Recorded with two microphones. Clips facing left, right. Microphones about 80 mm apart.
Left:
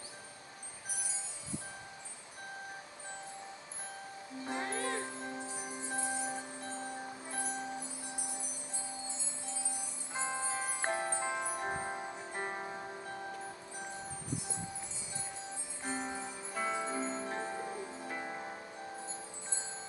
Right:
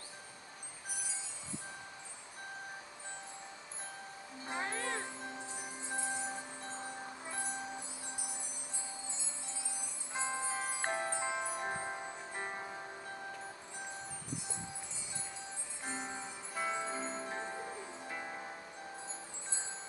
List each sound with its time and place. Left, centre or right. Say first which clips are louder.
4.6 s music: left 2 dB; left
5.6 s music: left 2 dB; centre
10.1 s music: left 1 dB; centre
15.8 s music: left 3 dB; centre